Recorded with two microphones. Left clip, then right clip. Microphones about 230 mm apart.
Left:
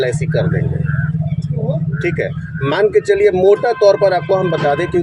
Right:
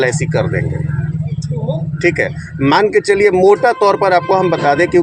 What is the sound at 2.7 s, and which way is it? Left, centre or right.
Speech, right.